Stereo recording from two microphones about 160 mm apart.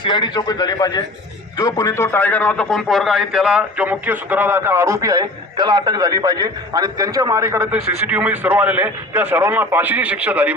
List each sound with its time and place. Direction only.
0.0 s a man's voice: 30° left (ahead or behind); by 10.5 s 10° right (ahead or behind)